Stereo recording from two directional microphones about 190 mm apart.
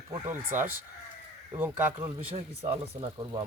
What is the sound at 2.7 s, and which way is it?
Speech, 25° right (ahead or behind).